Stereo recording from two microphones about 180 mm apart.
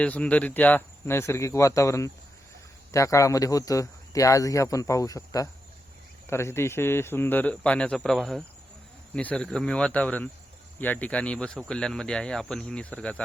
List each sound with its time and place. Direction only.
0.0 s speech: 5° left (ahead or behind)